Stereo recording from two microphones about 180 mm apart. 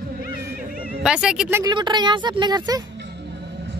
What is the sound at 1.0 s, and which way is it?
Speech, 5° right (ahead or behind).